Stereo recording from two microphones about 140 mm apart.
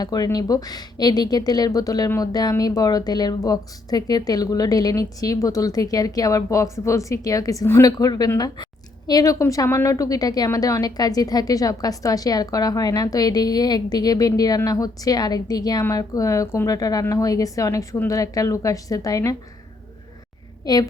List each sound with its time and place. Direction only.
0.0 s a woman's voice: 30° left (ahead or behind)
20.7 s a woman's voice: 30° left (ahead or behind)